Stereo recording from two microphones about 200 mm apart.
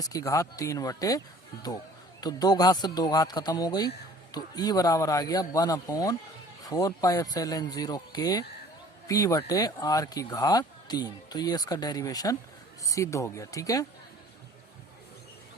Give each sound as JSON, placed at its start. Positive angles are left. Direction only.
{"t": 0.0, "sound": "speech", "side_deg": 15}
{"t": 2.2, "sound": "speech", "side_deg": 20}